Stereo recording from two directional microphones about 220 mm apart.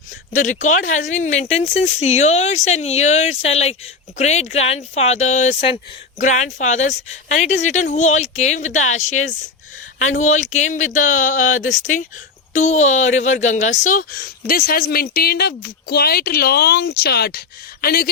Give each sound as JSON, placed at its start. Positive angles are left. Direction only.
{"t": 0.1, "sound": "speech", "side_deg": 35}